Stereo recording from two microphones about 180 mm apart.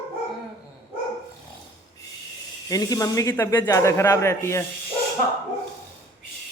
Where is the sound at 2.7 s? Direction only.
20° left (ahead or behind).